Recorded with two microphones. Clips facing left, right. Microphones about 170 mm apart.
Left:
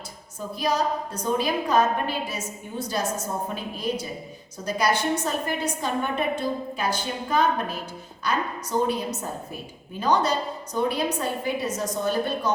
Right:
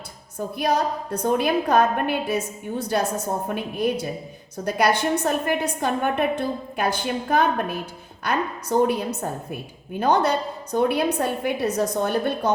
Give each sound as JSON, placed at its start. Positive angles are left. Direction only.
{"t": 0.3, "sound": "a woman's voice", "side_deg": -55}
{"t": 8.8, "sound": "a woman's voice", "side_deg": -60}